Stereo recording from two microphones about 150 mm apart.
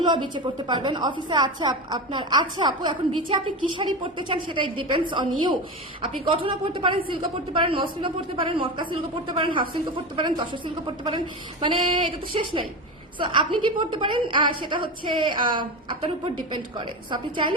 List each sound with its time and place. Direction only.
0.0 s a woman's voice: 30° right (ahead or behind)